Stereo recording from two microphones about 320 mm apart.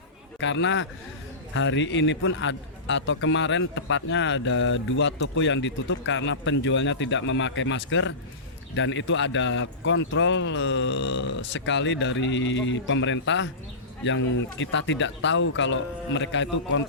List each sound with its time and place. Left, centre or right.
0.3 s a man's voice: left
14.6 s a man's voice: left